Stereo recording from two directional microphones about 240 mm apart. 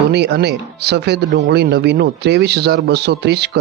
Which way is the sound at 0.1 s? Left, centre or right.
Right.